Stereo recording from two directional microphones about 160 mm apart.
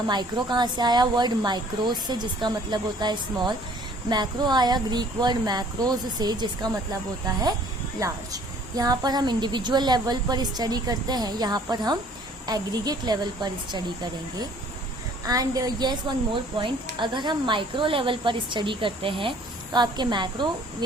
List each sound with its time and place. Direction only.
0.1 s a woman's voice: 30° right (ahead or behind)
7.9 s a woman's voice: 20° right (ahead or behind)